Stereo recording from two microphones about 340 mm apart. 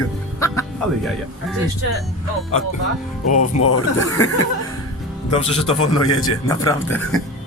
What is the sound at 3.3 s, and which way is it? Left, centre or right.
Speech, left.